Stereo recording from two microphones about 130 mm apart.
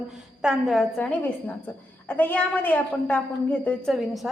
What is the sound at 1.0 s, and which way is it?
A woman's voice, 10° left (ahead or behind).